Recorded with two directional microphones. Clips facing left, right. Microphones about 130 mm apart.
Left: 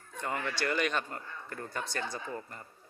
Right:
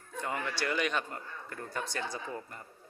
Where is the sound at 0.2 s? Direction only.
5° right (ahead or behind).